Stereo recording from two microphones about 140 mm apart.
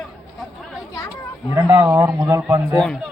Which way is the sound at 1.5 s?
20° right (ahead or behind).